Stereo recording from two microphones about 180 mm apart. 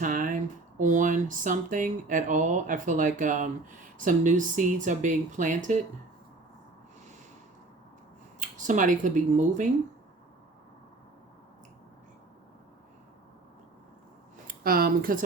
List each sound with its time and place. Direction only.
0.0 s a sound: 50° right (ahead or behind)
0.8 s speech: 45° right (ahead or behind)
8.4 s speech: 45° right (ahead or behind)
14.4 s speech: 55° right (ahead or behind)